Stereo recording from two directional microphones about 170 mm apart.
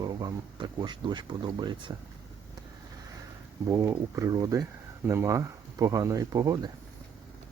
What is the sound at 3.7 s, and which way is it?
Speech, 15° right (ahead or behind).